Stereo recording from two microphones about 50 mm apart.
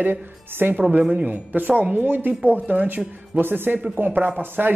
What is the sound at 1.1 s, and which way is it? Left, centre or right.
A man's voice, right.